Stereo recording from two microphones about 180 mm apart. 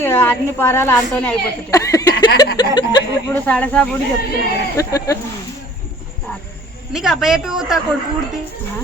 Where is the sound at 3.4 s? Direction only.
10° left (ahead or behind).